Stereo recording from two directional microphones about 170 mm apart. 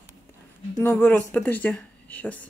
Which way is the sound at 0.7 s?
15° left (ahead or behind).